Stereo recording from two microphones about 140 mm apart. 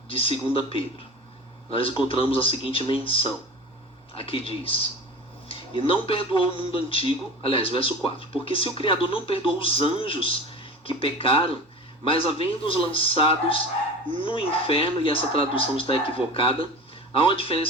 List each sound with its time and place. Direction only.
0.1 s a man's voice: 40° left (ahead or behind)